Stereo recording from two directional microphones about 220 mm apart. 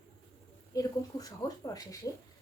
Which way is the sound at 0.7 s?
15° left (ahead or behind).